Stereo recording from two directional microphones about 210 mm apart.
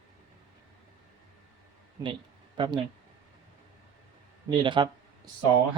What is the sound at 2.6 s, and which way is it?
Speech, 20° right (ahead or behind).